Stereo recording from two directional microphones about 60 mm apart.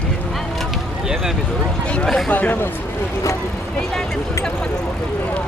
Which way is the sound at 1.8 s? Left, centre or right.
Centre.